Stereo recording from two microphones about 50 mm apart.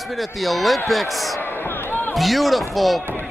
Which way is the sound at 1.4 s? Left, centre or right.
Left.